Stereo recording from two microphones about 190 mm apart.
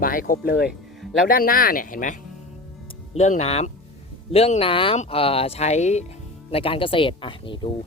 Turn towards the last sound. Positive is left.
turn(degrees=25)  # may be behind; listen again after turning